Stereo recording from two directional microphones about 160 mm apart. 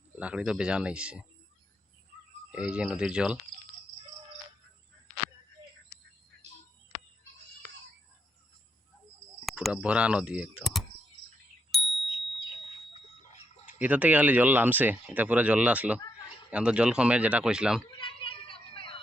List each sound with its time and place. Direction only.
0.2 s speech: 5° right (ahead or behind)
2.5 s speech: 5° right (ahead or behind)
9.5 s speech: 5° right (ahead or behind)
11.7 s bicycle bell: centre (ahead or behind)
13.7 s speech: 10° right (ahead or behind)
17.9 s a sound: 30° left (ahead or behind)